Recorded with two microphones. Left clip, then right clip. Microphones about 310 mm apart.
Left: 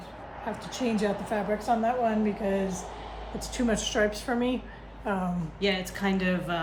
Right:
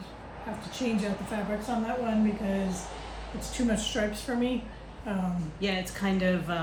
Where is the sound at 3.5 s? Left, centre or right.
Left.